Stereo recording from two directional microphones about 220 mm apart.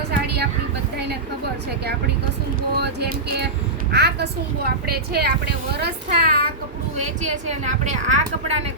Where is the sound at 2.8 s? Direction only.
45° right (ahead or behind).